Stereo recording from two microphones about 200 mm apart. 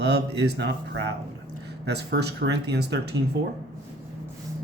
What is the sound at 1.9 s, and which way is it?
Speech, 55° right (ahead or behind).